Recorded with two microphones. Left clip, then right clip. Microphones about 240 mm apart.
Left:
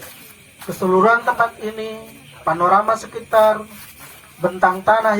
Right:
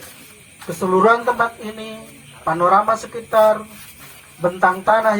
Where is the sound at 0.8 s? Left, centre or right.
Left.